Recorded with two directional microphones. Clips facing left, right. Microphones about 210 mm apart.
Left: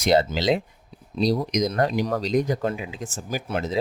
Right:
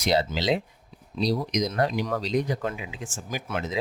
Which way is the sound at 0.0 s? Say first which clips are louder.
Left 4 dB; 50° left (ahead or behind).